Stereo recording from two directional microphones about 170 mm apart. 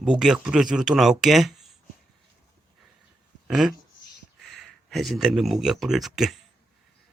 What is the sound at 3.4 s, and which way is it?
Speech, centre (ahead or behind).